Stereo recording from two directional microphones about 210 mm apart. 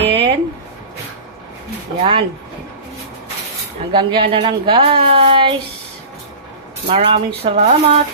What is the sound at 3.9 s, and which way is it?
Speech, 20° right (ahead or behind).